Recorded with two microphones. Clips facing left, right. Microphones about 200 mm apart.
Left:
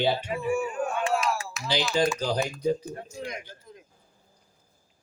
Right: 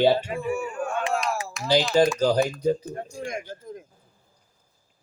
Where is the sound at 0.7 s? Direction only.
20° left (ahead or behind).